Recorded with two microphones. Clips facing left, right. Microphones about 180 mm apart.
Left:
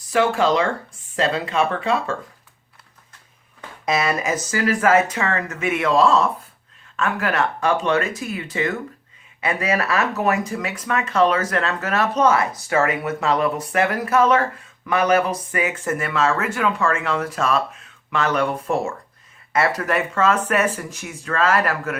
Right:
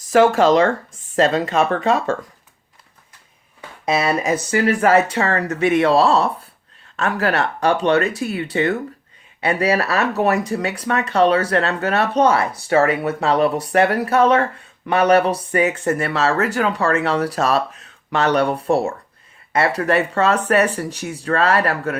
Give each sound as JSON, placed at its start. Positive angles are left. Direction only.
{"t": 0.1, "sound": "speech", "side_deg": -40}
{"t": 3.8, "sound": "speech", "side_deg": -30}